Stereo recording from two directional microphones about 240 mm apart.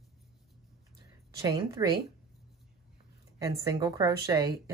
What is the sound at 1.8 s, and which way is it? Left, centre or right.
Speech, centre.